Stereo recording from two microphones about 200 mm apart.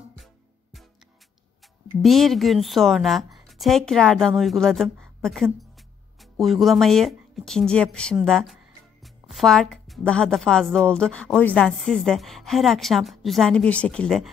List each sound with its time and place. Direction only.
2.0 s a woman's voice: centre (ahead or behind)